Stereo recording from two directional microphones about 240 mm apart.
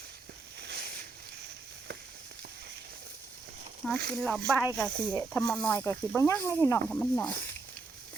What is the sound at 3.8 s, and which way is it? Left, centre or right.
Speech, centre.